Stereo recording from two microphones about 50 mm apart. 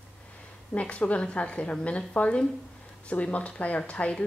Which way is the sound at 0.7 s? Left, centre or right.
Left.